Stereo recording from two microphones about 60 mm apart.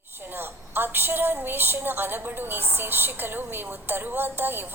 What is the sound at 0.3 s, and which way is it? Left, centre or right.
A woman's voice, right.